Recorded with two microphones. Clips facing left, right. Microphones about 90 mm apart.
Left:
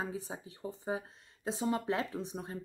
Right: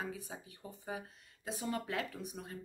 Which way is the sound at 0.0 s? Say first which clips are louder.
Left 4 dB; 30° left (ahead or behind).